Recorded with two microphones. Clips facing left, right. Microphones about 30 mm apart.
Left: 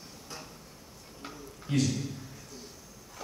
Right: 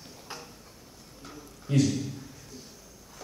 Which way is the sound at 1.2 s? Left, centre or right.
Centre.